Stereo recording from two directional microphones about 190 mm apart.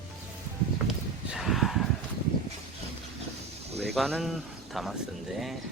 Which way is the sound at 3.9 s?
Centre (ahead or behind).